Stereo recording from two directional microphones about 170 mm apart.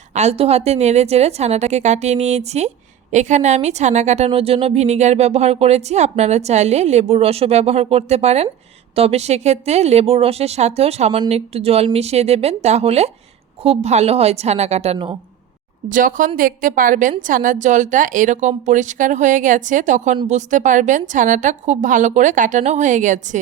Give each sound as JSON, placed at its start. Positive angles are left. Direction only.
{"t": 0.1, "sound": "a woman's voice", "side_deg": -40}
{"t": 14.9, "sound": "speech", "side_deg": -30}
{"t": 15.9, "sound": "a woman's voice", "side_deg": -50}